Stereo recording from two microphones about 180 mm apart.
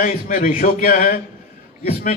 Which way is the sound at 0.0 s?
50° left (ahead or behind).